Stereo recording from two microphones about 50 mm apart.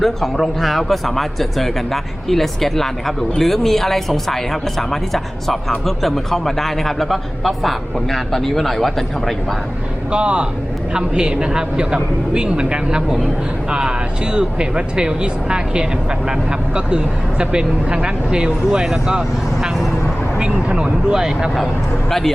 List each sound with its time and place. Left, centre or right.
0.0 s speech: centre
10.1 s speech: right
20.4 s speech: centre